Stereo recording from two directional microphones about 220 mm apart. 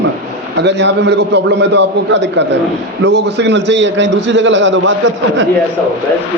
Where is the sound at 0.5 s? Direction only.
50° right (ahead or behind).